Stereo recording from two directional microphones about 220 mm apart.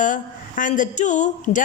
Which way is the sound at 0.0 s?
35° left (ahead or behind).